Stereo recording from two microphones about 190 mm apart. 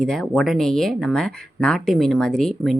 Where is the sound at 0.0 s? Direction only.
Centre (ahead or behind).